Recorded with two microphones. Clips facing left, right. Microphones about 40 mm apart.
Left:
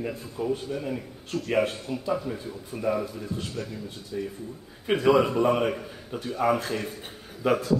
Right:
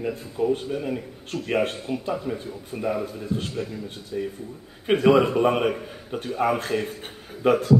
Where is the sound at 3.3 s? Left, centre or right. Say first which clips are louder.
Right 8 dB; right.